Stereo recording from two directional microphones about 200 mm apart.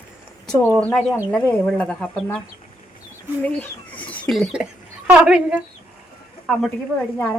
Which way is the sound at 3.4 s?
10° left (ahead or behind).